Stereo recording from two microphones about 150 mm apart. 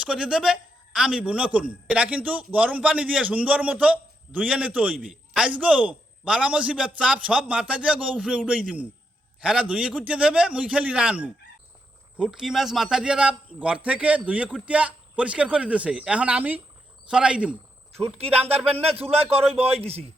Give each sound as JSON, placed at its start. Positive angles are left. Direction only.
{"t": 0.0, "sound": "a man's voice", "side_deg": -5}
{"t": 18.2, "sound": "speech", "side_deg": -40}